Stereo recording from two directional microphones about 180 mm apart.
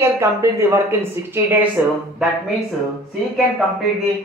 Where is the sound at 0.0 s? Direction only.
15° right (ahead or behind).